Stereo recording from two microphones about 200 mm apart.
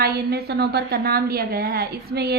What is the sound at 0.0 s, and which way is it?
A woman's voice, 55° right (ahead or behind).